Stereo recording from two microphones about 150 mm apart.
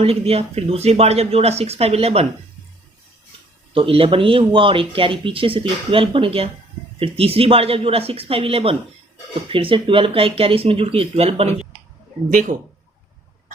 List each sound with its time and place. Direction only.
0.0 s speech: 40° right (ahead or behind)
3.7 s speech: 35° right (ahead or behind)
12.3 s a man's voice: 60° right (ahead or behind)